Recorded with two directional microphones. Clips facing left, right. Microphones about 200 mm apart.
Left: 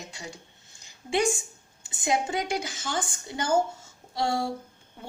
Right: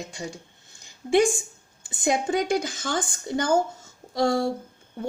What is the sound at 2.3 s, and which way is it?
A woman's voice, 50° right (ahead or behind).